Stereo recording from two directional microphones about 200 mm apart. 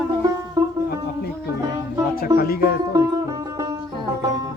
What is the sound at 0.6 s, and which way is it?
Music, 20° right (ahead or behind).